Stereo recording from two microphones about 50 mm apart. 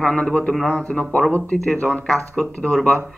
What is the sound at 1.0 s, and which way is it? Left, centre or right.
Speech, left.